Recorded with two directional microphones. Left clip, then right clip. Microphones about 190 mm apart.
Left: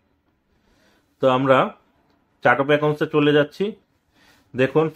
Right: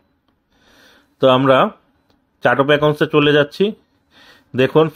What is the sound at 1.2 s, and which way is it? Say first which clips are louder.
Speech: right 5 dB; 40° right (ahead or behind).